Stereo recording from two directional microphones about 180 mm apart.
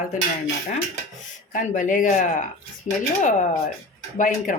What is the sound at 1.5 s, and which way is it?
Speech, 45° left (ahead or behind).